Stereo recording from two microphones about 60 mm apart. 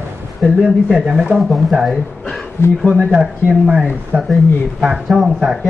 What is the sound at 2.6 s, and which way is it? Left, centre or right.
Speech, left.